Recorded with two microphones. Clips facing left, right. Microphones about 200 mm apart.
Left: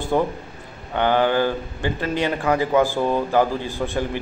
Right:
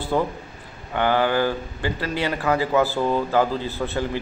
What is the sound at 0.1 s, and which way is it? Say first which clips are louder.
Speech: left 2 dB; 20° left (ahead or behind).